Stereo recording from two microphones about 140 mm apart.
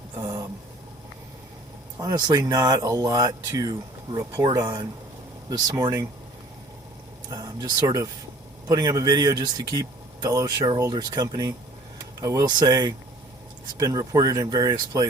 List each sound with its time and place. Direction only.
0.2 s a sound: 25° right (ahead or behind)
2.0 s speech: 30° right (ahead or behind)
7.3 s speech: 25° right (ahead or behind)